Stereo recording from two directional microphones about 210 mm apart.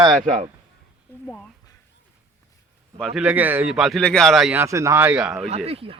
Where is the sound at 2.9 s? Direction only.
Centre (ahead or behind).